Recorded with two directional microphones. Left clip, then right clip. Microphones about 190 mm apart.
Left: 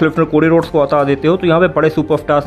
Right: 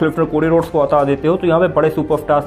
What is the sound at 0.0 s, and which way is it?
Speech, 25° left (ahead or behind).